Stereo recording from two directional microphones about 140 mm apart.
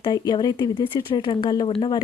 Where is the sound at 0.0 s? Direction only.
30° left (ahead or behind).